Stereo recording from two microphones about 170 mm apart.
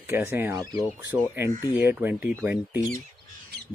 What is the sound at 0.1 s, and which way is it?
Speech, 15° right (ahead or behind).